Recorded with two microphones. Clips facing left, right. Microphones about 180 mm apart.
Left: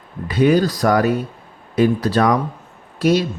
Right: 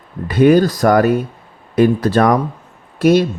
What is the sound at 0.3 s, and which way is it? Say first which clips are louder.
Speech: right 4 dB; 50° right (ahead or behind).